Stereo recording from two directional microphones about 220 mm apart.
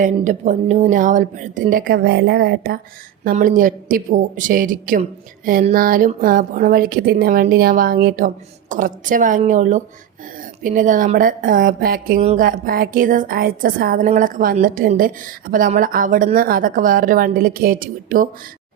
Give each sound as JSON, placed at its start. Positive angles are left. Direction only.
{"t": 0.0, "sound": "speech", "side_deg": -35}